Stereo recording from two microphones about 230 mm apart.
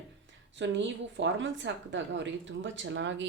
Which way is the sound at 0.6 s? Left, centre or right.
Right.